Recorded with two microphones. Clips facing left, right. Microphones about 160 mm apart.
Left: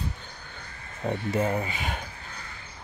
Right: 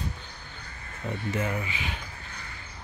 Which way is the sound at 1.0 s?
35° left (ahead or behind).